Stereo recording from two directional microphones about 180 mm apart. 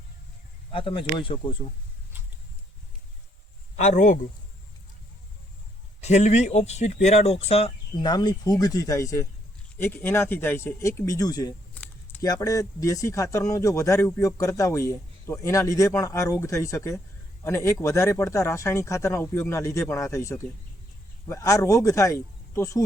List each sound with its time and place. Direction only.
0.7 s speech: 30° left (ahead or behind)
3.8 s speech: 45° left (ahead or behind)
6.0 s speech: 40° left (ahead or behind); by 11.5 s 20° left (ahead or behind)
11.7 s a sound: 10° left (ahead or behind)
12.2 s speech: 20° left (ahead or behind)